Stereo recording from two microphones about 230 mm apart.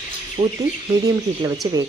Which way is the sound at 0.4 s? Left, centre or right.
Right.